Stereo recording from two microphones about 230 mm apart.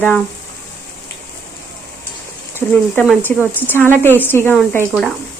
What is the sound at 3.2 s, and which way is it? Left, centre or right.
Speech, centre.